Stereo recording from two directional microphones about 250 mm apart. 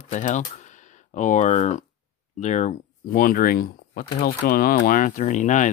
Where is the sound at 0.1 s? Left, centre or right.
Left.